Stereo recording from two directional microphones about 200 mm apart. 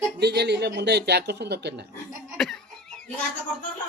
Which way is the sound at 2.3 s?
Centre (ahead or behind).